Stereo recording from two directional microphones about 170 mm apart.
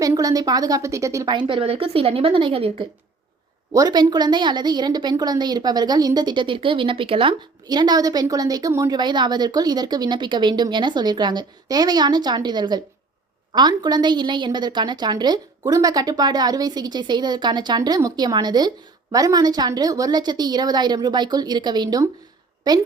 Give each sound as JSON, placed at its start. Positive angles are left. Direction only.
{"t": 0.0, "sound": "a woman's voice", "side_deg": -20}
{"t": 3.7, "sound": "a woman's voice", "side_deg": -20}